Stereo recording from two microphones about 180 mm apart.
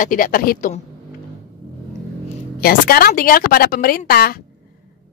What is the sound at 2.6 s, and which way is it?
Speech, 55° left (ahead or behind).